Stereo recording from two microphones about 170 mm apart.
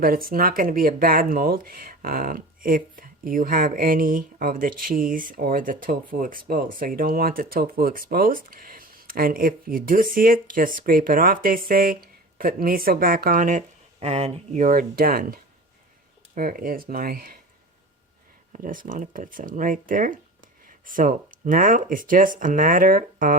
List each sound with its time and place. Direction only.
0.0 s speech: 60° right (ahead or behind)
18.5 s speech: 55° right (ahead or behind)